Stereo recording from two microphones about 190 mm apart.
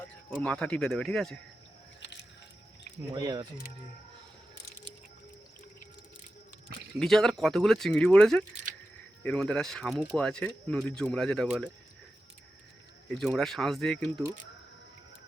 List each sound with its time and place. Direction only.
0.3 s speech: 5° left (ahead or behind)
3.1 s speech: 20° right (ahead or behind)
7.0 s speech: centre (ahead or behind)
13.1 s speech: centre (ahead or behind)